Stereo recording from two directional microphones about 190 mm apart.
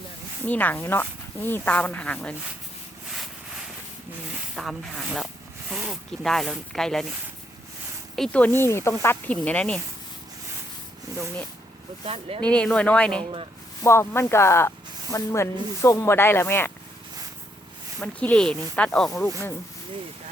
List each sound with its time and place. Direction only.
0.4 s speech: 10° left (ahead or behind)
4.5 s speech: centre (ahead or behind)
8.1 s speech: 5° left (ahead or behind)
12.0 s speech: 30° right (ahead or behind)
12.4 s speech: 5° left (ahead or behind)
18.0 s speech: 5° left (ahead or behind)